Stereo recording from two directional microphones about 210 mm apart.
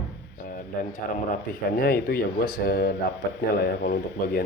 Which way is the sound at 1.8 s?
45° left (ahead or behind).